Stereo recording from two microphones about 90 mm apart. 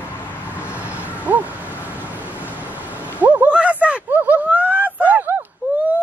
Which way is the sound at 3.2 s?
20° right (ahead or behind).